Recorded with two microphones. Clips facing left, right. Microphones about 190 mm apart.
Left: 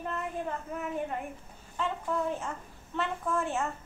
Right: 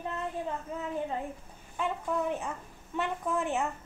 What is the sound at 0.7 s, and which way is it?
Speech, 15° right (ahead or behind).